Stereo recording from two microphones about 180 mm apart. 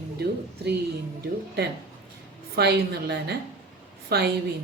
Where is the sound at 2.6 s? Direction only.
65° right (ahead or behind).